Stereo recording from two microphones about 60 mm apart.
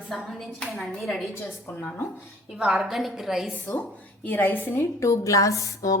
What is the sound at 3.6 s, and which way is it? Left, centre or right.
Speech, left.